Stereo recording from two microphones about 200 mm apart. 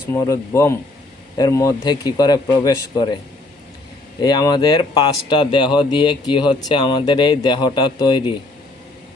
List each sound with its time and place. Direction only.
0.1 s speech: 15° left (ahead or behind)
4.2 s speech: 20° left (ahead or behind)